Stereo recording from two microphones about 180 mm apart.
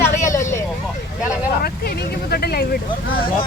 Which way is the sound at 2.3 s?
60° left (ahead or behind).